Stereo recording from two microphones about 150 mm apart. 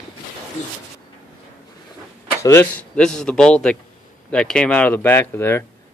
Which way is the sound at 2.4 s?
15° left (ahead or behind).